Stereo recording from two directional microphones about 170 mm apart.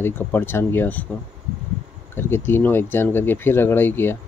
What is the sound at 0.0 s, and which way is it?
Speech, 10° left (ahead or behind).